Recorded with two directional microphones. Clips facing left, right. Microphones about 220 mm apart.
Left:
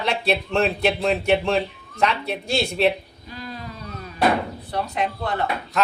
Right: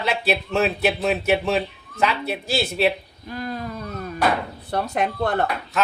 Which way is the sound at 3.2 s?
50° right (ahead or behind).